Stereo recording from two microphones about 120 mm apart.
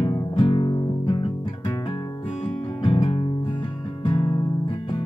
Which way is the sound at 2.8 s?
50° left (ahead or behind).